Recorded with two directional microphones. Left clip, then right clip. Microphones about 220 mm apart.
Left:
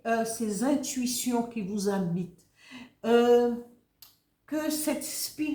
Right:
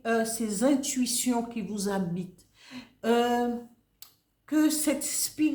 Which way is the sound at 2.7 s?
40° right (ahead or behind).